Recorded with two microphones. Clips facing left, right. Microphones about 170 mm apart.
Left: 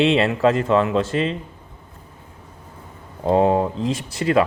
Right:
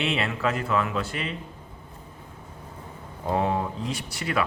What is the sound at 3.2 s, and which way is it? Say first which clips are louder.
Speech: left 9 dB; 30° left (ahead or behind).